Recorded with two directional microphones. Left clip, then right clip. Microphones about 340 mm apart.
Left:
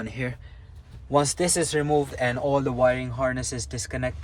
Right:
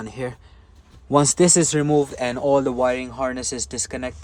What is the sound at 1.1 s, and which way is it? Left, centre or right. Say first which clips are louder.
Speech: right 6 dB; centre.